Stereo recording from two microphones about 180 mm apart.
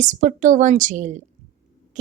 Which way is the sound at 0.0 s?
45° right (ahead or behind).